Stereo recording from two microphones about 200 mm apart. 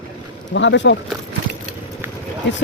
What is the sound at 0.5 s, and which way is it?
Speech, 65° left (ahead or behind).